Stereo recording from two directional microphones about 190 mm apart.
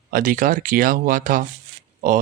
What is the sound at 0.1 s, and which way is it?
Speech, 45° right (ahead or behind).